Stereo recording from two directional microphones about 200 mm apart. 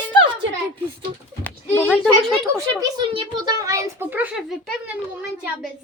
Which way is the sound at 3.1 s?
25° right (ahead or behind).